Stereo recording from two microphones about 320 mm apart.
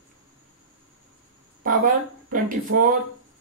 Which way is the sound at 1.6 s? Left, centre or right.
Right.